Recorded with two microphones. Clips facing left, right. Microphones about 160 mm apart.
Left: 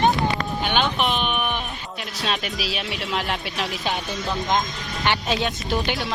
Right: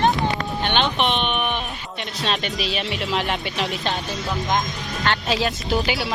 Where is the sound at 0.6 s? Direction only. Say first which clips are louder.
Right 1 dB; 5° left (ahead or behind).